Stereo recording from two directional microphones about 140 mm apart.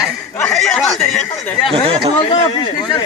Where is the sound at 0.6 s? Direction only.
5° left (ahead or behind).